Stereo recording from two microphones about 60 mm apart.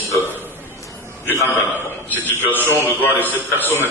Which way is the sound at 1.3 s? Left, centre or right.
Left.